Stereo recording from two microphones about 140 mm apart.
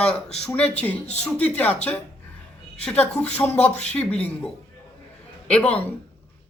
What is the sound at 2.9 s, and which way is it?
Speech, 45° left (ahead or behind).